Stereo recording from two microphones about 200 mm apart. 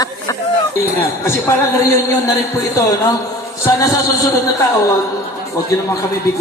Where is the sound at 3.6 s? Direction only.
15° left (ahead or behind).